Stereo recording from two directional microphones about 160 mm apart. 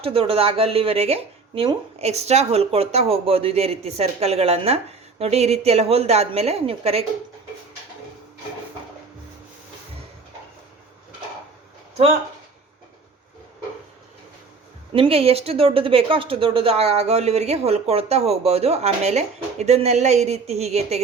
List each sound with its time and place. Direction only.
0.0 s speech: 35° right (ahead or behind)
14.9 s speech: 35° right (ahead or behind)